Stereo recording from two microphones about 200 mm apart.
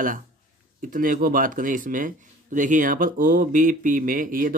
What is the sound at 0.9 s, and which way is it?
Speech, 45° right (ahead or behind).